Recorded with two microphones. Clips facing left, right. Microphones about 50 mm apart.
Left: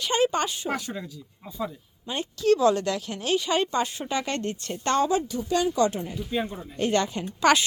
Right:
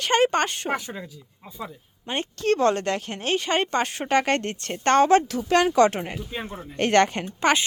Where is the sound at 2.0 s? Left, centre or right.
Right.